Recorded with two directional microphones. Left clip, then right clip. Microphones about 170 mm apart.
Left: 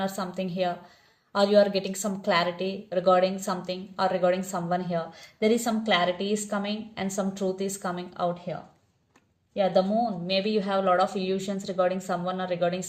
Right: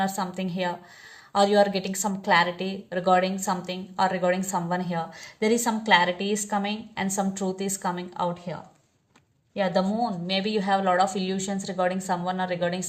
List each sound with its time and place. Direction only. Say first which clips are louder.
0.0 s a woman's voice: right 3 dB; 30° right (ahead or behind)
9.6 s a woman's voice: left 1 dB; 30° right (ahead or behind)